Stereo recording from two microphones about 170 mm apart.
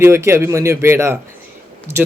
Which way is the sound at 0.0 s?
15° right (ahead or behind).